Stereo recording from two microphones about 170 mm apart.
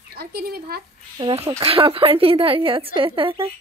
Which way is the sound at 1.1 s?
30° right (ahead or behind).